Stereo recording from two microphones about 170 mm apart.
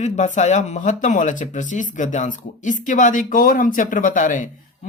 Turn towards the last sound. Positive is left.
turn(degrees=50)  # may be behind; listen again after turning